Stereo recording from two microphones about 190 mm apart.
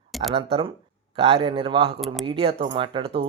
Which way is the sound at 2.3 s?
25° right (ahead or behind).